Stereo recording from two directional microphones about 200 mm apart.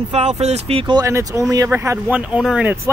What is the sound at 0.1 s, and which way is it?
Speech, 35° right (ahead or behind).